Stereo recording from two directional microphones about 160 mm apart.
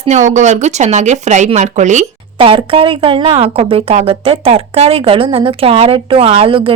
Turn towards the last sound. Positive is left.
turn(degrees=-35)  # may be behind; listen again after turning